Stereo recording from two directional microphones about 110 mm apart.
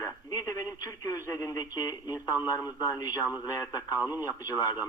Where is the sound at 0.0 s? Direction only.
35° left (ahead or behind).